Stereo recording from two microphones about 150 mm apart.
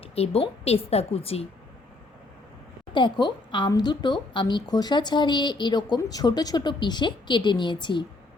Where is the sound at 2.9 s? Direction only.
30° left (ahead or behind).